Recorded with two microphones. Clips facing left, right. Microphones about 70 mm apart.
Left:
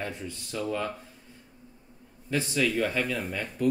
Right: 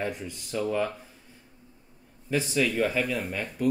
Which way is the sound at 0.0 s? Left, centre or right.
Centre.